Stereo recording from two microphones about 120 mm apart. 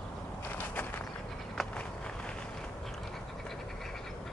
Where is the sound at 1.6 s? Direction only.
5° left (ahead or behind).